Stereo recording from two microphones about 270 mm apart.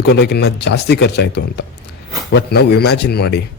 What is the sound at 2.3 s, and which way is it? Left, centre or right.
Speech, left.